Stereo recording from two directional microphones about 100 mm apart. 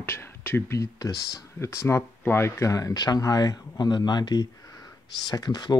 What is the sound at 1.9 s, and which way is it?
Speech, 25° left (ahead or behind).